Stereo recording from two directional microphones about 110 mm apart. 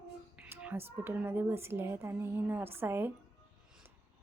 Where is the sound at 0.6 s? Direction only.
20° right (ahead or behind).